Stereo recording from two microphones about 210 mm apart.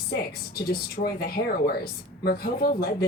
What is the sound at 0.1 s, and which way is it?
A woman's voice, 45° left (ahead or behind).